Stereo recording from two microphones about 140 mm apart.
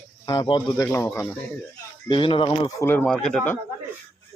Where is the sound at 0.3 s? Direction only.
35° left (ahead or behind).